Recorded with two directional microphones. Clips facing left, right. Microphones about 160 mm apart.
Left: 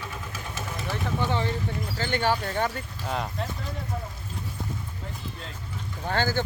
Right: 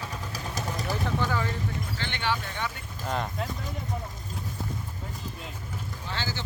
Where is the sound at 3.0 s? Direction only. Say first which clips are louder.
Even; centre (ahead or behind).